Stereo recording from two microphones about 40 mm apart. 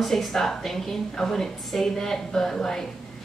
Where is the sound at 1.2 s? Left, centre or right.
Centre.